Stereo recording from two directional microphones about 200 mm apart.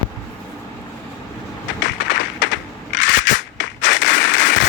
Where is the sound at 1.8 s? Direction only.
65° left (ahead or behind).